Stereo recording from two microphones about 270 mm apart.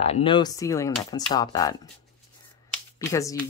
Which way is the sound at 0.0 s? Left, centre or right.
Left.